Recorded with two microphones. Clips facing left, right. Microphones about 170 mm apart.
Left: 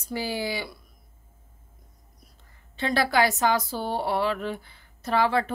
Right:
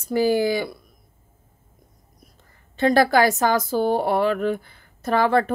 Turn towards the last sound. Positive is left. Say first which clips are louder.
# right 4 dB
turn(degrees=-50)  # may be behind; listen again after turning